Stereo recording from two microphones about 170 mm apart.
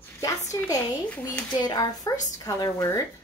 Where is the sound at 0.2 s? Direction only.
20° left (ahead or behind).